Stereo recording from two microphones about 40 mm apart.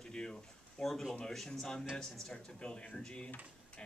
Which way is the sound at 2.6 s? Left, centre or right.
Left.